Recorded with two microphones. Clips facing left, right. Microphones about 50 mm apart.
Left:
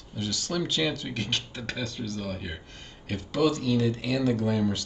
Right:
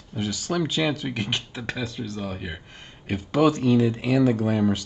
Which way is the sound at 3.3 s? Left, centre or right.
Right.